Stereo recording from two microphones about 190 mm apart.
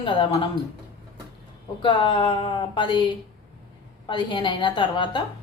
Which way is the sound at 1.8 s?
25° left (ahead or behind).